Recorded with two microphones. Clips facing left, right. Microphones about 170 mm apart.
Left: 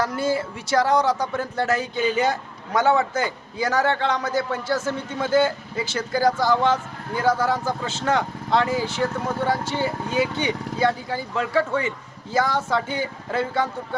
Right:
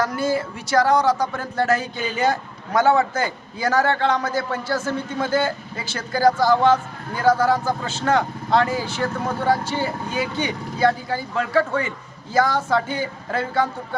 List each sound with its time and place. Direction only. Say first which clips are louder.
0.0 s speech: right 1 dB; 25° left (ahead or behind)